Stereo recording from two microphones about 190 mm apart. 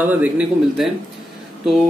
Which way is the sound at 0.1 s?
5° right (ahead or behind).